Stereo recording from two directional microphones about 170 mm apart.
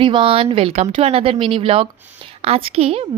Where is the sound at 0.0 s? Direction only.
30° right (ahead or behind).